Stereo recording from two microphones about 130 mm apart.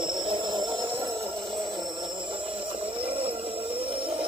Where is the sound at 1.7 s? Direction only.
35° right (ahead or behind).